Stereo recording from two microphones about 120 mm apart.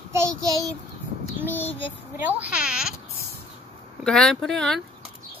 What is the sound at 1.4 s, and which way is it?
Speech, 15° left (ahead or behind).